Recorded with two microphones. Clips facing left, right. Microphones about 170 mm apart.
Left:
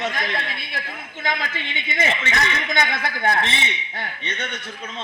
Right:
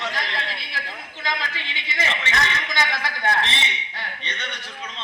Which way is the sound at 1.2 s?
50° left (ahead or behind).